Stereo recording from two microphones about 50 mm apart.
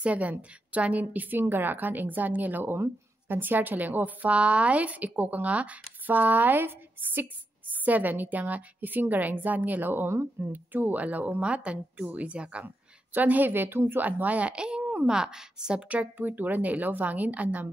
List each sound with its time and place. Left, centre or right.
0.0 s a woman's voice: right
1.4 s a woman's voice: right
2.6 s a woman's voice: right
7.7 s a woman's voice: right
12.6 s a woman's voice: right
14.0 s a woman's voice: right; by 15.8 s centre
15.9 s a woman's voice: right